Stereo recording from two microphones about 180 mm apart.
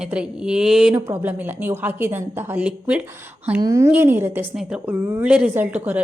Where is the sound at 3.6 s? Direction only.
15° right (ahead or behind).